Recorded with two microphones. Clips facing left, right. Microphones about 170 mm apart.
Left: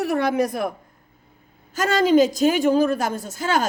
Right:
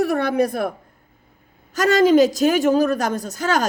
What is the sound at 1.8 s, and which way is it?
Speech, 45° right (ahead or behind).